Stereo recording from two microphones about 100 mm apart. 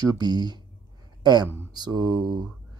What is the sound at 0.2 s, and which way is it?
Speech, 45° right (ahead or behind).